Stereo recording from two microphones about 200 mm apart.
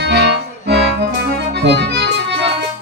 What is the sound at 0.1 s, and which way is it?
Music, 55° right (ahead or behind).